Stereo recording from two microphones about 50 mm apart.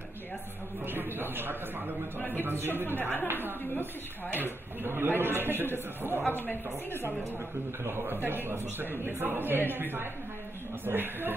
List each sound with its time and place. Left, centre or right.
0.8 s a man's voice: right
2.1 s speech: left
2.4 s a man's voice: right
3.0 s speech: left
4.3 s a man's voice: right
6.2 s speech: left
7.8 s a man's voice: right